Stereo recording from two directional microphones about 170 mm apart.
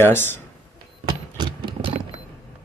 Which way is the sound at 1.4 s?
25° right (ahead or behind).